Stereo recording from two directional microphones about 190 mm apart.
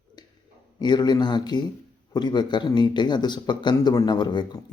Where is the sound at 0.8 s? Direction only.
20° left (ahead or behind).